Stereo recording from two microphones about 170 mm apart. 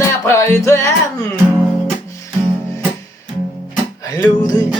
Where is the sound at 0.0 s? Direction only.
15° left (ahead or behind).